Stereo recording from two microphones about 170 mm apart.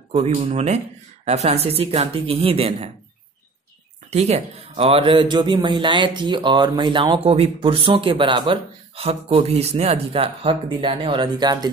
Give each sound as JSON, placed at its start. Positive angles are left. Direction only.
{"t": 0.1, "sound": "speech", "side_deg": -40}
{"t": 4.1, "sound": "speech", "side_deg": -40}